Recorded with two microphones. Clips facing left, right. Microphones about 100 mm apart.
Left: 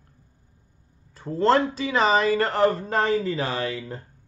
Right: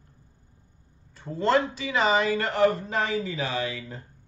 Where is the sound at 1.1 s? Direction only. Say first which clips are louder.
Left 3 dB; 35° left (ahead or behind).